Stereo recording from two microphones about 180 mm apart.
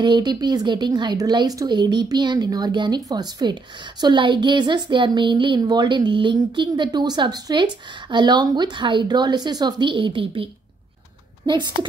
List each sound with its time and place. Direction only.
0.0 s speech: 25° right (ahead or behind)